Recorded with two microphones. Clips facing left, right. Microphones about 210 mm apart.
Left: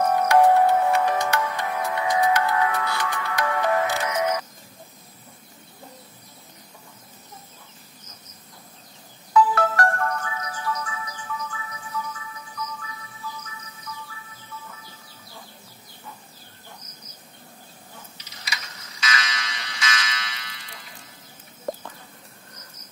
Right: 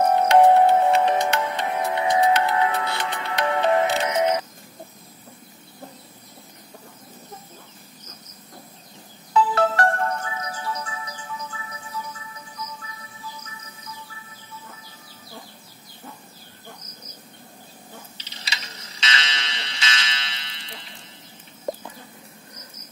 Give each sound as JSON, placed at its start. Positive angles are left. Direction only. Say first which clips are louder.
{"t": 0.0, "sound": "music", "louder": "right 2 dB", "side_deg": -25}
{"t": 9.3, "sound": "music", "louder": "even", "side_deg": -30}
{"t": 18.1, "sound": "fire alarm", "louder": "left 3 dB", "side_deg": -30}